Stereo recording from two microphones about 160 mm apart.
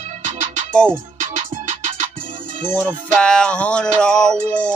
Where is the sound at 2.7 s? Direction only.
5° left (ahead or behind).